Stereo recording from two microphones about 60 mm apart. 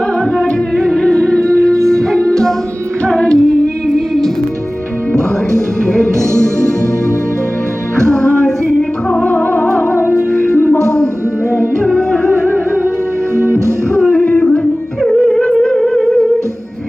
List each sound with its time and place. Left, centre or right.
0.3 s music: centre
3.8 s a sound: centre
5.1 s music: centre
7.9 s music: centre
9.3 s music: left
10.5 s music: left
11.8 s music: centre
13.3 s music: right
14.0 s music: centre